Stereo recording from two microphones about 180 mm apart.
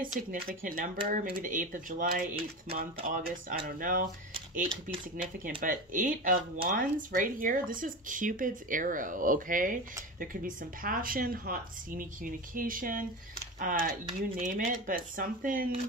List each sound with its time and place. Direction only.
0.0 s speech: 50° right (ahead or behind)